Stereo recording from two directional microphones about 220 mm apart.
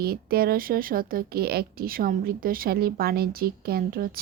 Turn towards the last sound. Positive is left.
turn(degrees=-40)  # may be behind; listen again after turning